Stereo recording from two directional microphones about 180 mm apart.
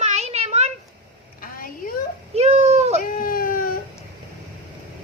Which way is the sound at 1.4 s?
50° left (ahead or behind).